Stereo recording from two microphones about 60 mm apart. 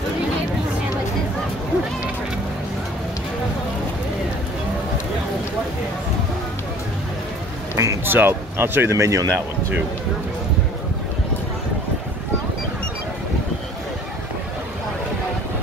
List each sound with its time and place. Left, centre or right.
7.7 s music: right
8.0 s speech: right
8.9 s speech: right